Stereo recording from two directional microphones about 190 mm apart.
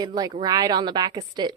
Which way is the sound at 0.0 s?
20° right (ahead or behind).